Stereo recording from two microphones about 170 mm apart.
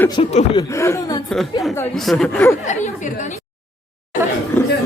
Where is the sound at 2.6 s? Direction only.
45° left (ahead or behind).